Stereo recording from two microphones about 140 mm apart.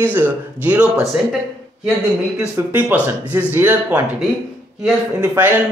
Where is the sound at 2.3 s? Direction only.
15° right (ahead or behind).